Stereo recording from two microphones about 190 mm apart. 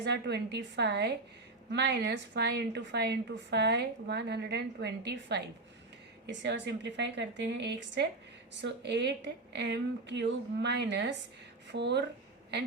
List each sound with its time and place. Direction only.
0.0 s a woman's voice: 65° right (ahead or behind)